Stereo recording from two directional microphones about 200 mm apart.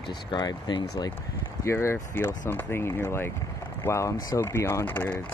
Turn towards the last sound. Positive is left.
turn(degrees=10)  # may be behind; listen again after turning